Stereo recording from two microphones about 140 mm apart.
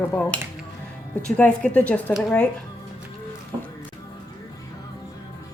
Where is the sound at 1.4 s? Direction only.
10° left (ahead or behind).